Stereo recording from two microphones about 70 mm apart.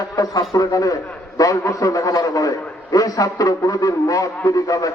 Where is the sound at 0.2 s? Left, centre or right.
Left.